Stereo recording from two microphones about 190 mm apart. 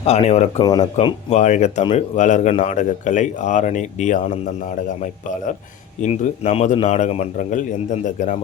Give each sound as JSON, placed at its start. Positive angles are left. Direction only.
{"t": 0.0, "sound": "speech", "side_deg": 35}
{"t": 0.6, "sound": "speech", "side_deg": 20}
{"t": 0.9, "sound": "speech", "side_deg": 35}
{"t": 1.8, "sound": "speech", "side_deg": 25}
{"t": 2.1, "sound": "speech", "side_deg": 40}
{"t": 6.0, "sound": "speech", "side_deg": 35}